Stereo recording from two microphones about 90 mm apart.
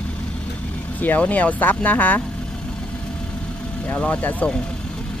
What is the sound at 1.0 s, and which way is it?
Speech, 20° left (ahead or behind).